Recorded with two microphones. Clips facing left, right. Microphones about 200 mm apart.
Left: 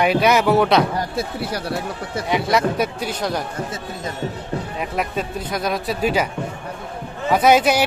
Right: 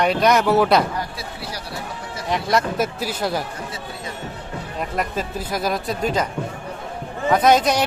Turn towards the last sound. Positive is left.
turn(degrees=5)  # may be behind; listen again after turning